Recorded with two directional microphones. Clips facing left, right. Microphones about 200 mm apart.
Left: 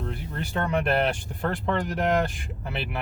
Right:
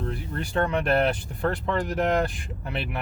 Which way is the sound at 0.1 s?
Centre (ahead or behind).